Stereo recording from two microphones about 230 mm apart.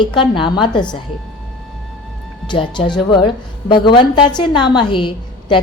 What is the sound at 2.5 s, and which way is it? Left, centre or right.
A woman's voice, centre.